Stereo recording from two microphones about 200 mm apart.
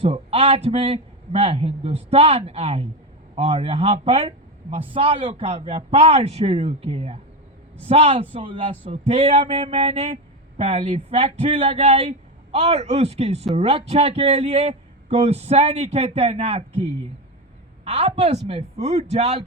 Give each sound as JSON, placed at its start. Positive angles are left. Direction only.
{"t": 0.0, "sound": "a man's voice", "side_deg": -30}